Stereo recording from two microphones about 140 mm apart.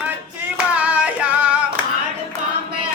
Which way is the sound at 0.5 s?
10° right (ahead or behind).